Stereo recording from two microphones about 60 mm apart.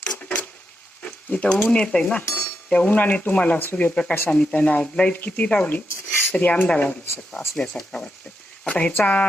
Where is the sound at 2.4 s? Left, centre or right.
Left.